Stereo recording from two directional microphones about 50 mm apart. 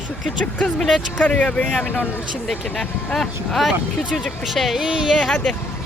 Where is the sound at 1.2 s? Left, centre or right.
Left.